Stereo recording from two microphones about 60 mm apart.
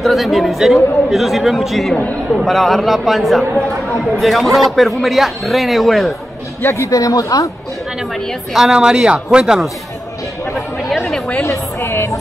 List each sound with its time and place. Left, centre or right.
0.0 s speech: centre
6.6 s speech: left
6.9 s speech: left
8.5 s speech: centre
10.5 s chatter: centre
11.4 s speech: left